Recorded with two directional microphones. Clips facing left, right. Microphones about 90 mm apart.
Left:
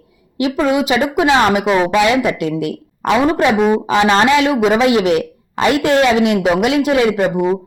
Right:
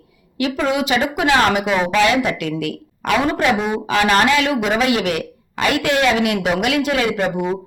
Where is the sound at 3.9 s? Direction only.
20° left (ahead or behind).